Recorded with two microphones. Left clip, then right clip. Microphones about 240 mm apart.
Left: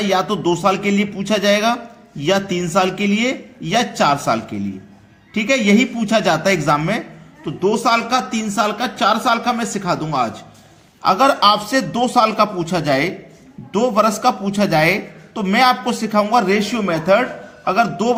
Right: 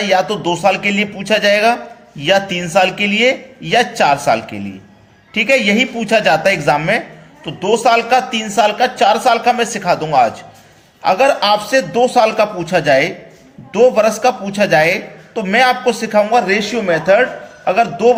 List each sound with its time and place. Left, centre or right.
0.0 s a man's voice: centre